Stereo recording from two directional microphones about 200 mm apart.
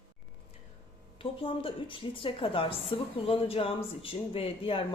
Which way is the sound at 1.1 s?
25° left (ahead or behind).